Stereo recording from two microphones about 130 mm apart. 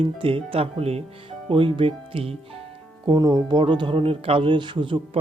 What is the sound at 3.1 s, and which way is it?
Speech, 30° right (ahead or behind).